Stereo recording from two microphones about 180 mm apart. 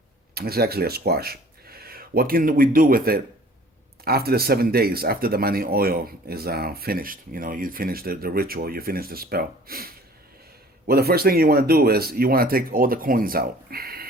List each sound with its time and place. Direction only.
0.3 s speech: 60° right (ahead or behind)